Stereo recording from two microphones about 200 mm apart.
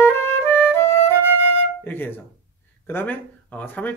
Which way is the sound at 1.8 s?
10° left (ahead or behind).